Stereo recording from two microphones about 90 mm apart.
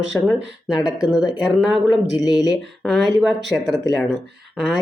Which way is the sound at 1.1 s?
50° left (ahead or behind).